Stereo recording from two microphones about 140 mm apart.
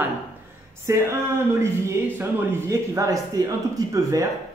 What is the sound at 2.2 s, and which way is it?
A man's voice, 15° right (ahead or behind).